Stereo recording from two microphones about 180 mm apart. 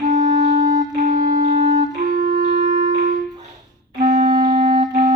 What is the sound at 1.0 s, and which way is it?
Wind instrument, 50° right (ahead or behind).